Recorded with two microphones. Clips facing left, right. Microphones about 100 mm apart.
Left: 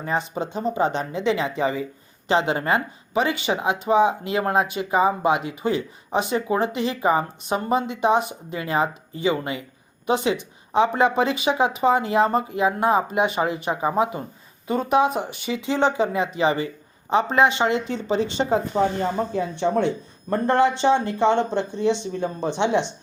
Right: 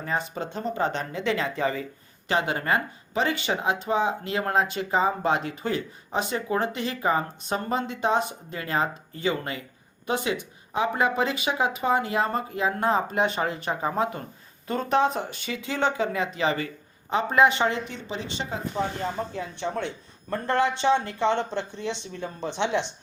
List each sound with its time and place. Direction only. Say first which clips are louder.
0.0 s speech: left 4 dB; 20° left (ahead or behind)
18.1 s speech: left 12 dB; 40° left (ahead or behind)
18.7 s speech: left 7 dB; 30° left (ahead or behind)